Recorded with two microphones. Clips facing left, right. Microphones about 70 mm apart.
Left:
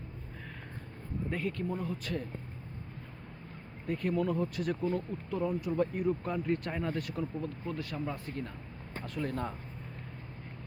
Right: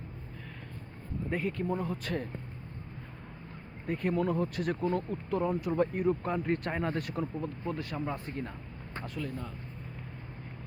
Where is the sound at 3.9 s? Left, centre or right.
Right.